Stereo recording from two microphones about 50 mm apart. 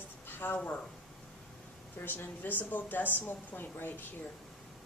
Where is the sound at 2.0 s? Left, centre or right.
Left.